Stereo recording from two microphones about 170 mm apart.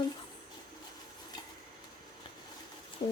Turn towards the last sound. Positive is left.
turn(degrees=25)  # may be behind; listen again after turning